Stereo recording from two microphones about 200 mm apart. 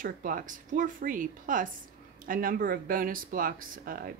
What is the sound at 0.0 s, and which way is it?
Speech, 45° right (ahead or behind).